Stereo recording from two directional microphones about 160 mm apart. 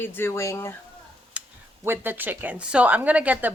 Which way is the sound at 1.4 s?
5° right (ahead or behind).